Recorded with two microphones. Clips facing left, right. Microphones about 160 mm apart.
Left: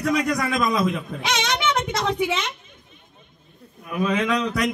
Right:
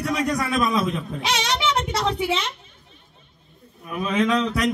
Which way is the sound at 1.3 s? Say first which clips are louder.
Even; 35° right (ahead or behind).